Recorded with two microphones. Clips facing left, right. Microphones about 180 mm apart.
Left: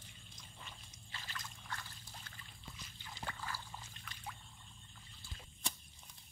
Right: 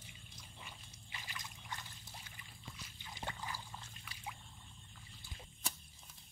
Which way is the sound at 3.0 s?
20° right (ahead or behind).